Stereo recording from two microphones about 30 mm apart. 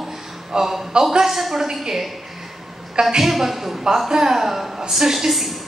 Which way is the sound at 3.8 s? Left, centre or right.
Centre.